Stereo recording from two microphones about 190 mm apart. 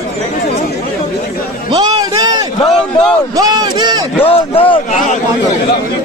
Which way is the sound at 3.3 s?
20° right (ahead or behind).